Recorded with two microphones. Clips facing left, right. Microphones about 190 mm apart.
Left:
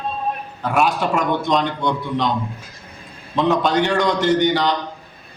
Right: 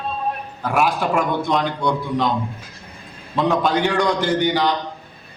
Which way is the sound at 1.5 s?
10° right (ahead or behind).